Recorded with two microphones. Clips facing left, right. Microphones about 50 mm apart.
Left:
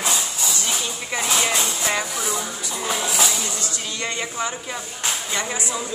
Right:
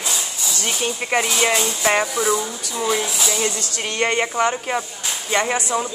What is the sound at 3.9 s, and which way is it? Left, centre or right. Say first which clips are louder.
Speech: right 9 dB; right.